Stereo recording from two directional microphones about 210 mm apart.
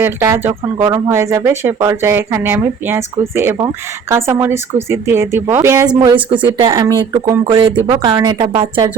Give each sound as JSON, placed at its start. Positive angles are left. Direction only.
{"t": 0.0, "sound": "speech", "side_deg": -10}